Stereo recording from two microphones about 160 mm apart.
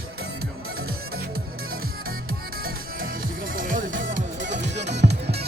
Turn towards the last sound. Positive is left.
turn(degrees=-90)